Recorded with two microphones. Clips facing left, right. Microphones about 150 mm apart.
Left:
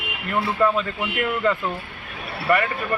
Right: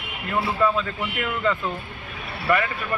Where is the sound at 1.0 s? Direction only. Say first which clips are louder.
Left 3 dB; 10° left (ahead or behind).